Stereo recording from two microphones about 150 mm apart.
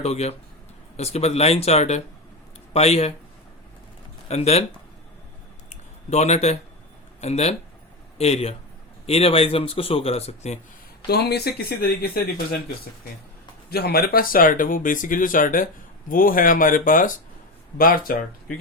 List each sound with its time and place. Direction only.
0.0 s speech: 45° left (ahead or behind)
4.3 s speech: 45° left (ahead or behind)
5.6 s a sound: 50° left (ahead or behind)
7.2 s speech: 45° left (ahead or behind)
11.1 s speech: 90° left
13.7 s speech: 90° left; by 18.1 s 75° left (ahead or behind)